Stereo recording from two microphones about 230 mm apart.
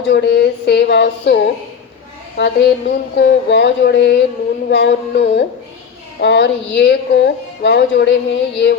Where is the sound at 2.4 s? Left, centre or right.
Left.